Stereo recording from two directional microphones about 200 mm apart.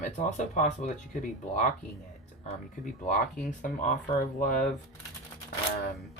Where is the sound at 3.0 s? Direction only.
40° left (ahead or behind).